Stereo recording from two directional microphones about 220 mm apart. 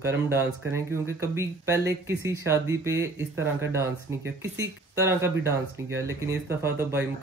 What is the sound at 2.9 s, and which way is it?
Speech, 55° right (ahead or behind).